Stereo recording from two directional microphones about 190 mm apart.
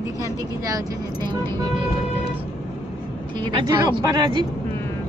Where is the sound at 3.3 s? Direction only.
25° right (ahead or behind).